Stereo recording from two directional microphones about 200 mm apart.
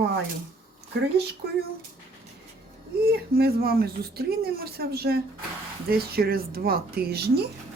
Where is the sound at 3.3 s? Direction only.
50° right (ahead or behind).